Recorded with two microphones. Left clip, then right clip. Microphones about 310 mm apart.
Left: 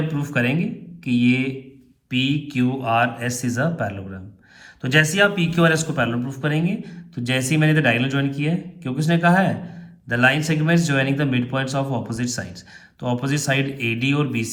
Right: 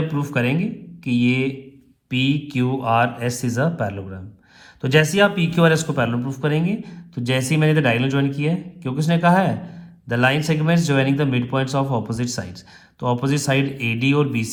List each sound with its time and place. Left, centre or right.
0.1 s speech: centre